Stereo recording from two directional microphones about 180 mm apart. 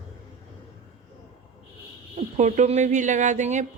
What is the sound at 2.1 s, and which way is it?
Speech, 40° right (ahead or behind).